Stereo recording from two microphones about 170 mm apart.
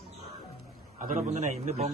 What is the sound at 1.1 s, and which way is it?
Speech, 45° right (ahead or behind).